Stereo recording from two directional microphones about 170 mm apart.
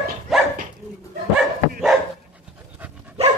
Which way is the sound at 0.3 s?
Centre (ahead or behind).